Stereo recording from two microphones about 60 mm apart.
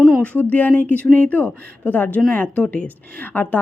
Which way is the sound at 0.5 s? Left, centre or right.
Left.